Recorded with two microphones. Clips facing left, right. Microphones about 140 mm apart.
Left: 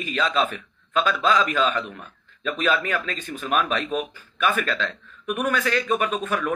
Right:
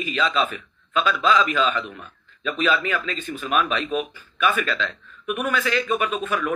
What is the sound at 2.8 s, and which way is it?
Speech, 50° left (ahead or behind).